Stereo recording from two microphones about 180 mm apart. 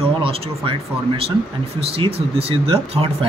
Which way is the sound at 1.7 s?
30° right (ahead or behind).